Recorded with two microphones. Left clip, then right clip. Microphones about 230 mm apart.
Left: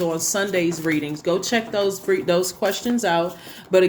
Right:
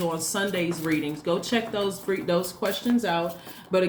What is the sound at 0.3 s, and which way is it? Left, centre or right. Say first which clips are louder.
Speech: left 6 dB; left.